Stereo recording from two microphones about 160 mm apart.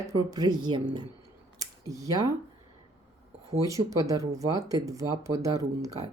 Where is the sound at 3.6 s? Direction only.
20° right (ahead or behind).